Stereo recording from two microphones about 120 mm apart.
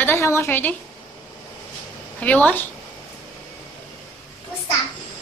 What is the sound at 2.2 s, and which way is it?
Speech, 10° left (ahead or behind).